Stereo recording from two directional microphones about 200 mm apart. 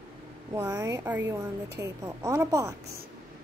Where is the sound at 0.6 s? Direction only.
15° right (ahead or behind).